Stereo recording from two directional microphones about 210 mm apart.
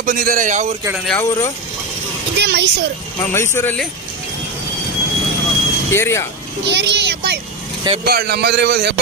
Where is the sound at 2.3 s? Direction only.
55° right (ahead or behind).